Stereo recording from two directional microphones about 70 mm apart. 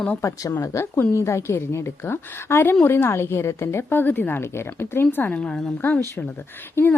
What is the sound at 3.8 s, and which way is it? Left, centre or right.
Speech, left.